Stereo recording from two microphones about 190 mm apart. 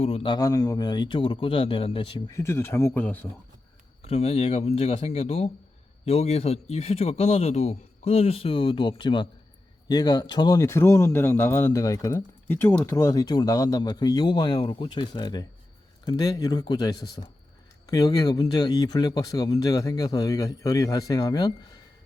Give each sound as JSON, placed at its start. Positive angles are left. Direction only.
{"t": 0.0, "sound": "speech", "side_deg": 30}
{"t": 0.3, "sound": "speech", "side_deg": 20}
{"t": 4.0, "sound": "speech", "side_deg": 35}